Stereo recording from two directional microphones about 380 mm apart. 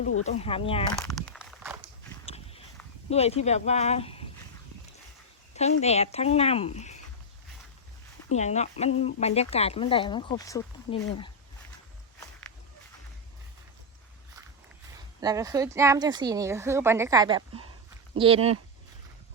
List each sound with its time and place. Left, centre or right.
0.3 s speech: centre
0.9 s a sound: centre
2.2 s a sound: centre
3.1 s speech: centre
5.8 s speech: centre
8.4 s speech: centre
15.2 s a woman's voice: centre